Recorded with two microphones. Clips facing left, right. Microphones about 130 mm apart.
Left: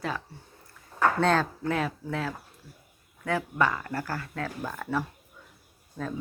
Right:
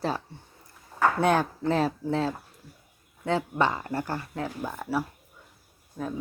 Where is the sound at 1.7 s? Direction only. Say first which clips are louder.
Right 5 dB; 30° right (ahead or behind).